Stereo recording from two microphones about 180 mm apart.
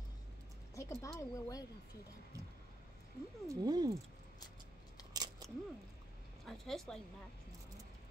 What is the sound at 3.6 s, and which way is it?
Speech, 20° right (ahead or behind).